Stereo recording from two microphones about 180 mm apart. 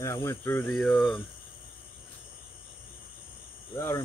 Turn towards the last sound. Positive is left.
turn(degrees=20)  # may be behind; listen again after turning